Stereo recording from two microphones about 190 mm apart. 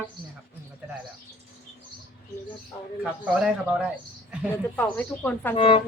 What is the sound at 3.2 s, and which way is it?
Speech, 5° right (ahead or behind).